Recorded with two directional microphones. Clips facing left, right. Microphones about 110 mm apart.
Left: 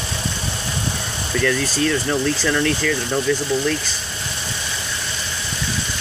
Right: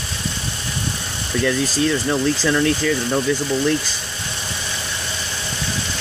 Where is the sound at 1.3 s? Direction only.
20° right (ahead or behind).